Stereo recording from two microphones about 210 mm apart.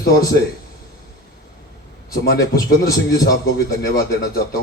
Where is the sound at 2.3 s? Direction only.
45° left (ahead or behind).